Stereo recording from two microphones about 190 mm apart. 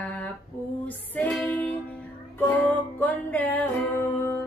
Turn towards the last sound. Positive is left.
turn(degrees=10)  # may be behind; listen again after turning